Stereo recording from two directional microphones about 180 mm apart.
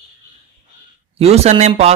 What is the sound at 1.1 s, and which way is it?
Speech, 35° right (ahead or behind).